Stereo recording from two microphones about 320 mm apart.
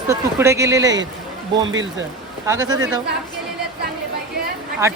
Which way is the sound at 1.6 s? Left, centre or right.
Right.